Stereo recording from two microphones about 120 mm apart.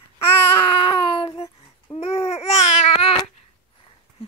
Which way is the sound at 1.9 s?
55° left (ahead or behind).